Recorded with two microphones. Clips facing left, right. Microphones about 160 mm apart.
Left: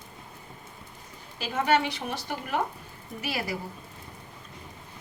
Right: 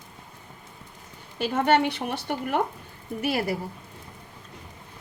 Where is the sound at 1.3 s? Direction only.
60° right (ahead or behind).